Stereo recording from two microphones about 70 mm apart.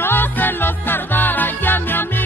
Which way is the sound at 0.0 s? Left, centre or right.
Left.